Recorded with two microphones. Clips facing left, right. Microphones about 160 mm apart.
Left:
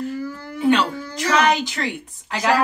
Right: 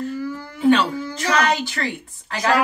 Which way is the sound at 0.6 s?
15° left (ahead or behind).